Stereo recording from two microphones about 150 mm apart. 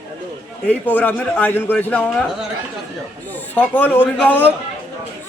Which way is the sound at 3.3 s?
10° left (ahead or behind).